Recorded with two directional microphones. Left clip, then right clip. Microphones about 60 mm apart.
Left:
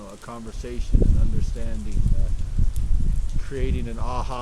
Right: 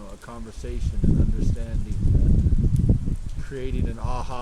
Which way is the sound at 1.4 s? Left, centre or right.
Right.